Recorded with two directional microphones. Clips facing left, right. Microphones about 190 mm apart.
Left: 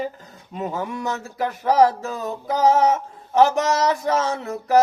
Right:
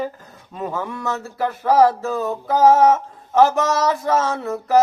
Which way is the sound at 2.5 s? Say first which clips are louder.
Right 4 dB; 50° right (ahead or behind).